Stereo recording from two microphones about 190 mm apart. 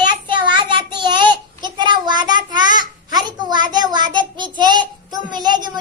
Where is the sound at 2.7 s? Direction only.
20° right (ahead or behind).